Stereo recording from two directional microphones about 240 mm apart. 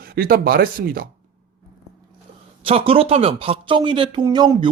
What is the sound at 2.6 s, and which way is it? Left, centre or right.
Speech, right.